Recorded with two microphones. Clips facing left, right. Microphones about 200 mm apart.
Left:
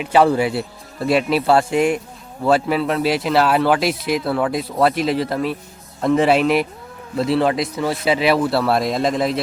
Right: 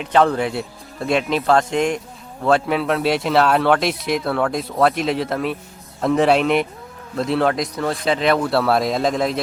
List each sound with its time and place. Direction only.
0.0 s speech: 5° left (ahead or behind)